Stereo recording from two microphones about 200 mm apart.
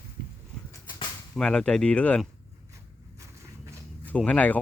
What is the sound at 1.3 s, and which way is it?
Speech, 5° left (ahead or behind).